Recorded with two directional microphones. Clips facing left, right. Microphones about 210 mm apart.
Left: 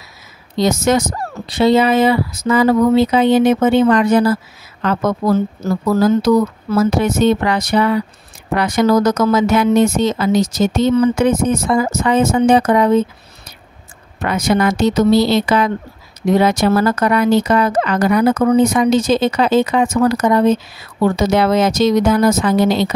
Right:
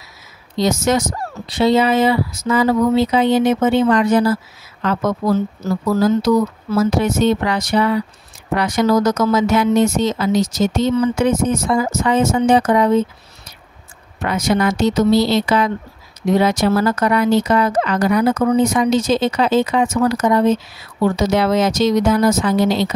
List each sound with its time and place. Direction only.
0.6 s speech: 55° left (ahead or behind)
14.2 s speech: 55° left (ahead or behind)